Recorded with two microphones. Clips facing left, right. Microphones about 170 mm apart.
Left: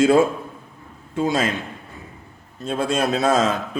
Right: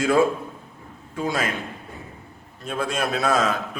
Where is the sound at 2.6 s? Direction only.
30° left (ahead or behind).